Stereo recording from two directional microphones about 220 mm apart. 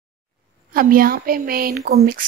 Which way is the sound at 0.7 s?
40° right (ahead or behind).